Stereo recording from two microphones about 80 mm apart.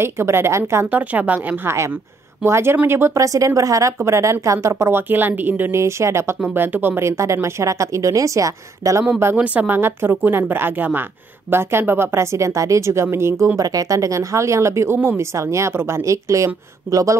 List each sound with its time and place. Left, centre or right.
0.0 s speech: right
0.8 s a woman's voice: centre
3.2 s speech: right
5.8 s a woman's voice: right
7.1 s speech: right
9.4 s a woman's voice: centre; by 13.5 s right
13.6 s speech: right